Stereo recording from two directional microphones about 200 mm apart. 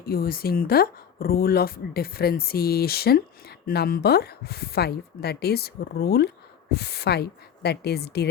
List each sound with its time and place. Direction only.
0.0 s speech: 50° left (ahead or behind)